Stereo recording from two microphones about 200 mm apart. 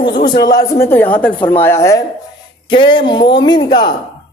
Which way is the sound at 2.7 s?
25° left (ahead or behind).